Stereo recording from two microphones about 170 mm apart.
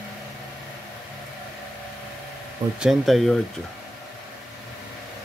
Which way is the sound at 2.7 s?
Centre (ahead or behind).